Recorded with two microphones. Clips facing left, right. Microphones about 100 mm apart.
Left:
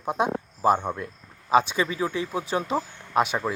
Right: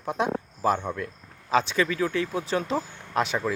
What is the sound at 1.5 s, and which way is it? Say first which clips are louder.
Speech: left 2 dB; 15° left (ahead or behind).